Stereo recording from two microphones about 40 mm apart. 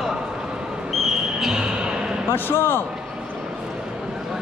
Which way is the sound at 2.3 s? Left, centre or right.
Left.